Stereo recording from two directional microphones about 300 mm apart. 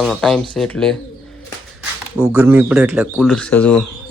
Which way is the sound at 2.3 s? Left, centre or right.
Centre.